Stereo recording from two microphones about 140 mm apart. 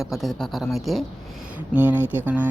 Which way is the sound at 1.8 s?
15° right (ahead or behind).